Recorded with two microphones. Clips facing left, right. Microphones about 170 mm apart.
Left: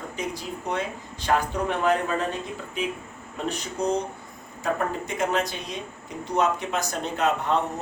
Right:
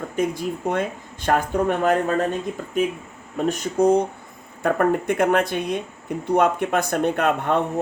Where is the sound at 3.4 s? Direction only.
50° right (ahead or behind).